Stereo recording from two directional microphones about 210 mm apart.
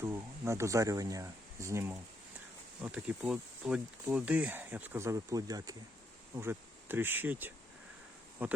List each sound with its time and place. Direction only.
0.0 s speech: 10° right (ahead or behind)